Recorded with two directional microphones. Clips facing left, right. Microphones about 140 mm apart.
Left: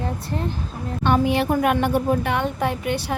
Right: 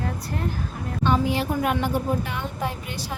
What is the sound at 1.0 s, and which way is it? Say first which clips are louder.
Speech: left 4 dB; 65° left (ahead or behind).